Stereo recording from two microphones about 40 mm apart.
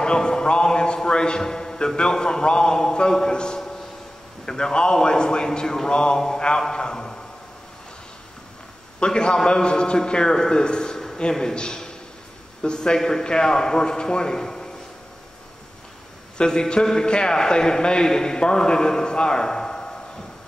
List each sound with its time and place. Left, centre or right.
0.0 s a man's voice: centre
6.7 s a sound: centre
9.0 s a man's voice: left
16.3 s a man's voice: centre